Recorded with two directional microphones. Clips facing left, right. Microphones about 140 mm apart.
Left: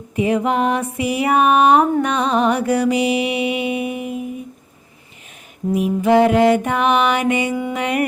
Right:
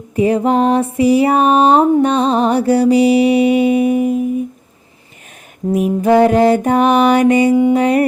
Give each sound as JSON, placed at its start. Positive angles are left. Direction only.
{"t": 0.2, "sound": "music", "side_deg": -35}
{"t": 5.7, "sound": "music", "side_deg": -45}